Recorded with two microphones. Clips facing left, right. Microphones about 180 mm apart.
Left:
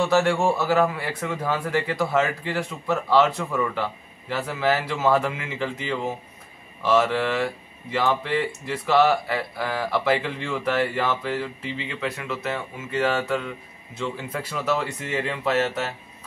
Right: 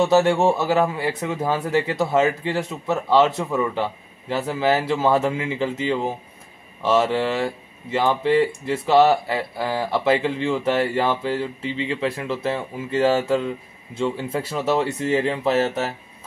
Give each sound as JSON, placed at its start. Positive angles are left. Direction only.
{"t": 0.0, "sound": "speech", "side_deg": -20}